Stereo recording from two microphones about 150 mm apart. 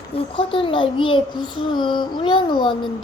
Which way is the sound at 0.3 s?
35° left (ahead or behind).